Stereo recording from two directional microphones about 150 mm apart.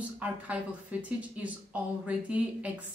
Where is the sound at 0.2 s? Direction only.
10° right (ahead or behind).